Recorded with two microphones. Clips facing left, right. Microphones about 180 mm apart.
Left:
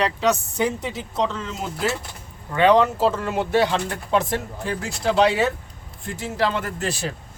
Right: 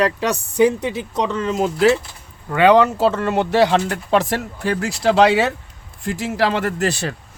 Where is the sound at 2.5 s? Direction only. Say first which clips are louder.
Right 3 dB; 90° right.